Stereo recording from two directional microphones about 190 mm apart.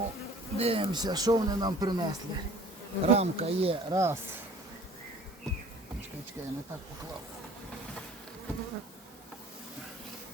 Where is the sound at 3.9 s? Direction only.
15° right (ahead or behind).